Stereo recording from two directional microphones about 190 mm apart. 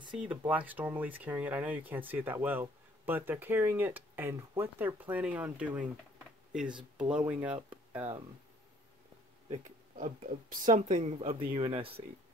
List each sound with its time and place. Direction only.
0.3 s speech: 10° right (ahead or behind)
9.5 s speech: 40° right (ahead or behind)